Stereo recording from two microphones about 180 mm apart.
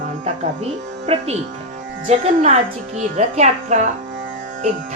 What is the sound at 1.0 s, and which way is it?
Speech, 35° right (ahead or behind).